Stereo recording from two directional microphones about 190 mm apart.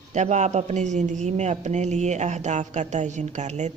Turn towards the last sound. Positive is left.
turn(degrees=-40)  # may be behind; listen again after turning